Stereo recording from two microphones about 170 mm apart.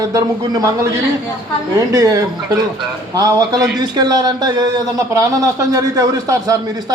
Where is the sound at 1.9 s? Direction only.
20° right (ahead or behind).